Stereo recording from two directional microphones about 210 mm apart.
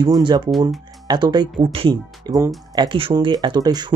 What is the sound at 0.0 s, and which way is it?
Speech, 20° right (ahead or behind).